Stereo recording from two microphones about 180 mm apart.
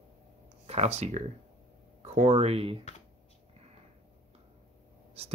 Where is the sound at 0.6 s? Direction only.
35° right (ahead or behind).